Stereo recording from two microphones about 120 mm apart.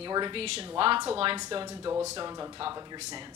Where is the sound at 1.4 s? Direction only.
35° right (ahead or behind).